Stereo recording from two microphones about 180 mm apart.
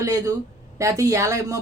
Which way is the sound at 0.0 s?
20° right (ahead or behind).